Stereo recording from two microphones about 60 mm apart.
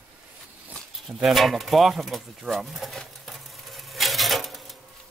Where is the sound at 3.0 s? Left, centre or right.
Centre.